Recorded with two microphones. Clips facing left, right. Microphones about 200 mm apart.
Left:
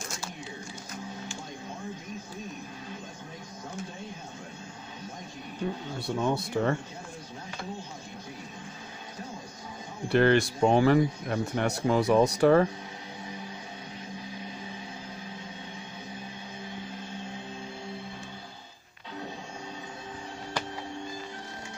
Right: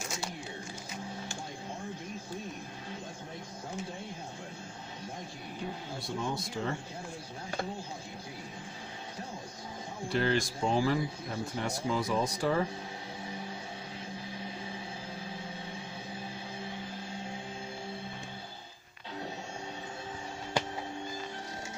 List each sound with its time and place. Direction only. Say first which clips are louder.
5.9 s speech: left 7 dB; 65° left (ahead or behind)
10.0 s speech: left 7 dB; 65° left (ahead or behind)